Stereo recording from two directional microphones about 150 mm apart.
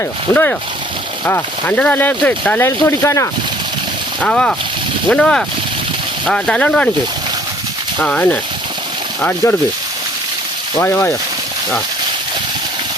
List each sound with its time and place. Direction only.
0.3 s speech: 20° left (ahead or behind)
4.2 s speech: 5° left (ahead or behind)
8.0 s speech: 10° left (ahead or behind)
10.8 s speech: 15° left (ahead or behind)